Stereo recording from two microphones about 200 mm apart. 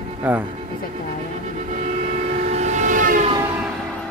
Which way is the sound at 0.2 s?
10° right (ahead or behind).